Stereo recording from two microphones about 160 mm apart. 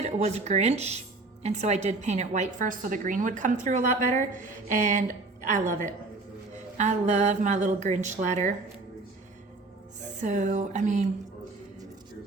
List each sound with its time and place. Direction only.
0.0 s speech: 45° right (ahead or behind)
10.2 s speech: 50° right (ahead or behind)